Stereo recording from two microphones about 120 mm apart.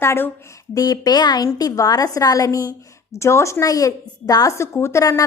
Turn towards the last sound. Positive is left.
turn(degrees=25)  # may be behind; listen again after turning